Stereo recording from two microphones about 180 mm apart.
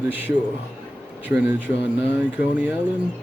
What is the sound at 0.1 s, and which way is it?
Speech, 10° right (ahead or behind).